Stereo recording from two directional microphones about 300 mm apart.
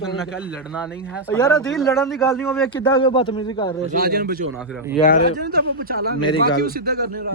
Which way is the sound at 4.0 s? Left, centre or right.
Right.